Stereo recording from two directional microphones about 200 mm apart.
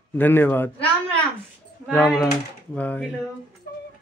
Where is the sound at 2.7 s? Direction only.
5° left (ahead or behind).